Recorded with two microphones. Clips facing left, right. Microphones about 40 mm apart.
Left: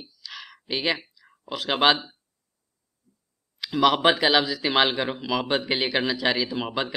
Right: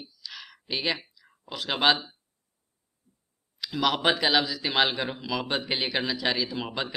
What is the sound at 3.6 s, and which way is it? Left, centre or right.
Speech, centre.